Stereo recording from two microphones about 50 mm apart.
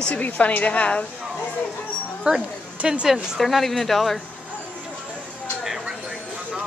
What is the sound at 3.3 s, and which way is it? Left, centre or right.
Speech, centre.